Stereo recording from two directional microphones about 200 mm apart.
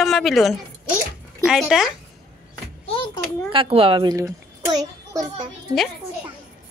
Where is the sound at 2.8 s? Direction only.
25° left (ahead or behind).